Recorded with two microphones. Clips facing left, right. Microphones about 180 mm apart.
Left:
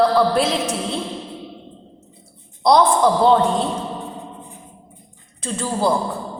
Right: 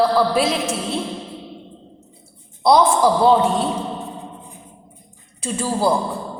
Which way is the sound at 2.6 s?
5° right (ahead or behind).